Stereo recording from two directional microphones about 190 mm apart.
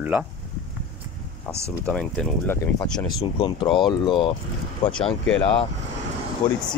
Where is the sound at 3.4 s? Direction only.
25° left (ahead or behind).